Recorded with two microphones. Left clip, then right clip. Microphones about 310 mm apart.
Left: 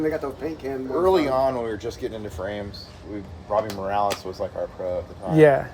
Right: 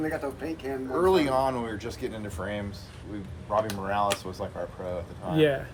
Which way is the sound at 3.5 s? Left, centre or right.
Right.